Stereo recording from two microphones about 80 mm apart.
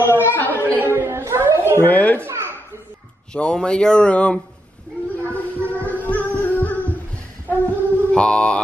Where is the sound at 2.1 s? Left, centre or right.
Right.